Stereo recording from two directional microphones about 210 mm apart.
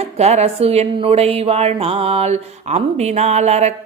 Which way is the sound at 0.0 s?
30° right (ahead or behind).